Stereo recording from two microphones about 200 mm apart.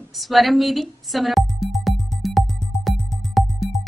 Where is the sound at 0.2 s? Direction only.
Centre (ahead or behind).